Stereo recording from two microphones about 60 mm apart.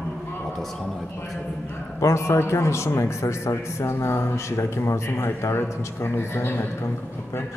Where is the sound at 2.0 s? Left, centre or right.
Left.